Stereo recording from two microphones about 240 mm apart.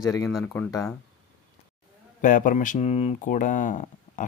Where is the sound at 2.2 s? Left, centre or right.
Left.